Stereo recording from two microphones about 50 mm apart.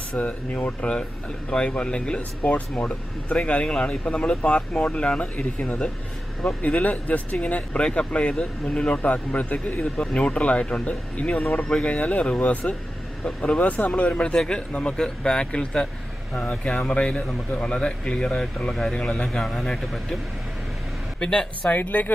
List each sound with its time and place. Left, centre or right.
0.2 s speech: left
2.4 s speech: left
9.9 s speech: centre
19.4 s a man's voice: centre
21.2 s speech: left
21.6 s speech: left